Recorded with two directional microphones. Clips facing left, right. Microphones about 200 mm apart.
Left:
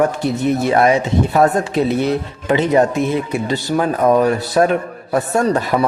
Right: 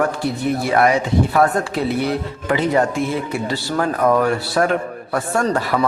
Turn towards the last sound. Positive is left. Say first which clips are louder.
# left 3 dB
turn(degrees=20)  # may be behind; listen again after turning